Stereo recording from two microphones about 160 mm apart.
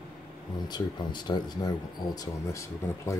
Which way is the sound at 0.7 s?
25° left (ahead or behind).